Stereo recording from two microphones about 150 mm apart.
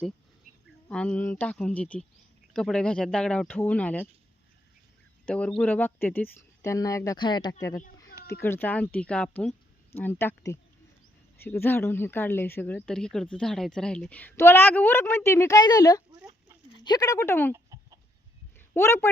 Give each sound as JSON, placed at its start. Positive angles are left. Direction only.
{"t": 0.9, "sound": "a woman's voice", "side_deg": 10}
{"t": 5.2, "sound": "a woman's voice", "side_deg": 5}
{"t": 8.4, "sound": "a woman's voice", "side_deg": 15}
{"t": 17.5, "sound": "chicken", "side_deg": -25}
{"t": 18.7, "sound": "a woman's voice", "side_deg": 15}